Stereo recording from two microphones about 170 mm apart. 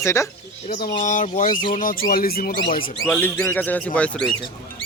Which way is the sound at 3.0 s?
10° left (ahead or behind).